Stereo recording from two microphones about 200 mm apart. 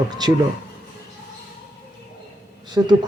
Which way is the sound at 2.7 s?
20° right (ahead or behind).